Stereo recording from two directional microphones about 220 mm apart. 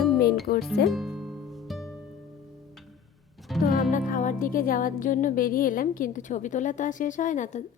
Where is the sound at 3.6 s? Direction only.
35° left (ahead or behind).